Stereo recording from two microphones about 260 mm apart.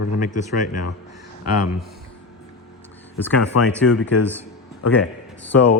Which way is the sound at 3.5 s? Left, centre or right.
Left.